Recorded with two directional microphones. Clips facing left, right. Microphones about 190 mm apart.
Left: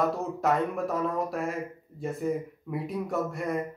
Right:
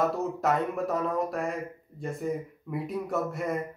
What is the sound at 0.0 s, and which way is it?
A man's voice, centre (ahead or behind).